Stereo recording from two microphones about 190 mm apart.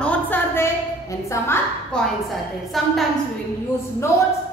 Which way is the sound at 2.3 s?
Centre (ahead or behind).